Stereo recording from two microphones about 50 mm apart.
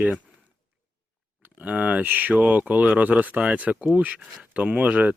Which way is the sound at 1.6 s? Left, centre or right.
Right.